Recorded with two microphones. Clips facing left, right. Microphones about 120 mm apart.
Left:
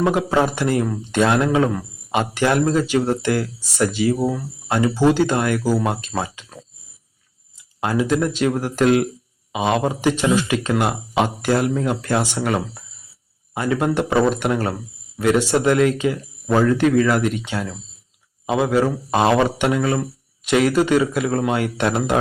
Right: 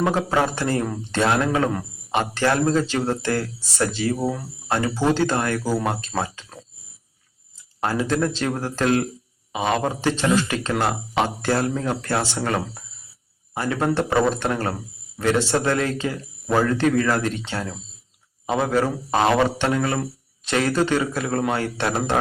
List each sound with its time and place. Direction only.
0.0 s speech: 15° left (ahead or behind)
7.8 s speech: 15° left (ahead or behind)